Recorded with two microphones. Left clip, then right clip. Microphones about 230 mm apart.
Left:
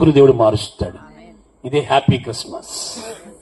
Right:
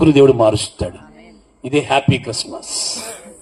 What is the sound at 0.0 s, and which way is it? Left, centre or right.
A man's voice, right.